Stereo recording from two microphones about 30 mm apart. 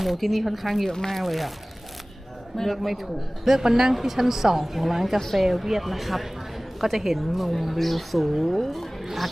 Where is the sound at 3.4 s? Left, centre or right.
Centre.